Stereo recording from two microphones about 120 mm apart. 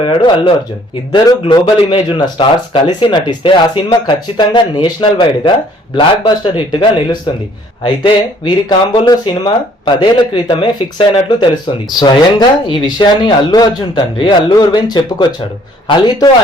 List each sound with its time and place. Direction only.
0.0 s speech: 45° left (ahead or behind)
1.6 s speech: 45° left (ahead or behind)